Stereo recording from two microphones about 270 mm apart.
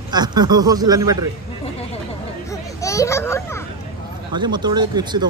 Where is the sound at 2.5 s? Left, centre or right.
Centre.